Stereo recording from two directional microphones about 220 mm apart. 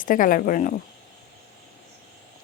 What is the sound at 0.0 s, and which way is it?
Speech, 40° left (ahead or behind).